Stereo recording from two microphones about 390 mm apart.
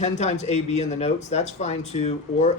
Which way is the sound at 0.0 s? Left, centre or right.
Centre.